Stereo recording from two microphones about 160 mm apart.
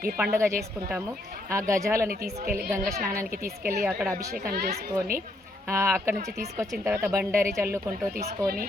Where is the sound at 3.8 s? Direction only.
5° right (ahead or behind).